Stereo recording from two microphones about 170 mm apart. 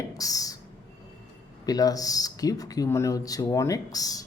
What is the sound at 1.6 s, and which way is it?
Speech, 20° left (ahead or behind).